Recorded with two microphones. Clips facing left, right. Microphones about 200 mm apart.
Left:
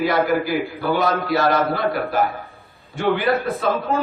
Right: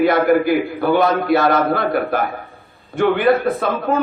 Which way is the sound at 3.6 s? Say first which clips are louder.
Even; 55° right (ahead or behind).